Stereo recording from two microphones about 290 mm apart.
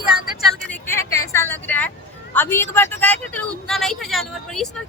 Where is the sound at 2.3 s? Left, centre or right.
Centre.